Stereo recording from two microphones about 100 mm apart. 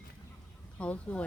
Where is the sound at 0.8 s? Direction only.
15° left (ahead or behind).